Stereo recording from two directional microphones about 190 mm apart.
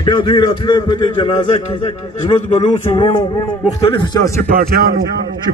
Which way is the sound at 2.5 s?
35° left (ahead or behind).